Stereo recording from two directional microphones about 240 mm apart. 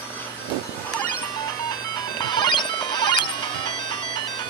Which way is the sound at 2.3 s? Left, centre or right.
Centre.